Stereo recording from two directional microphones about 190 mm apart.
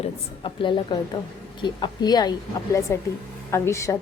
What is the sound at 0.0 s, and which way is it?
A woman's voice, 25° left (ahead or behind).